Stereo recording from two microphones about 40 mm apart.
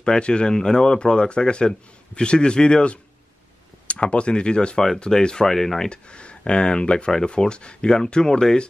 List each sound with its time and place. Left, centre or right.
0.0 s speech: left
5.9 s speech: left